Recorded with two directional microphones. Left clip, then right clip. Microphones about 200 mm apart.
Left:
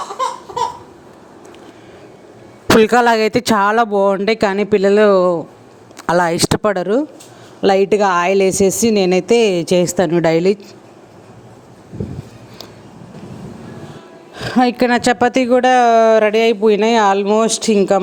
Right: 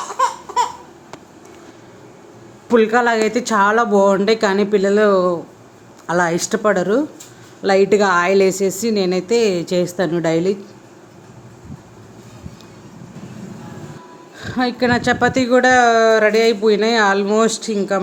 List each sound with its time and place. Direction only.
2.7 s speech: 60° left (ahead or behind); by 5.4 s 40° left (ahead or behind)
6.1 s speech: 50° left (ahead or behind)
14.3 s speech: 35° left (ahead or behind)